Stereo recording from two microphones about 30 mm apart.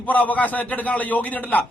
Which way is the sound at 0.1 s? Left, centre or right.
Left.